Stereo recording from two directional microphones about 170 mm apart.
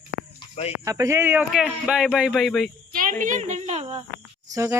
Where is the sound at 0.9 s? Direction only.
20° right (ahead or behind); by 2.7 s centre (ahead or behind).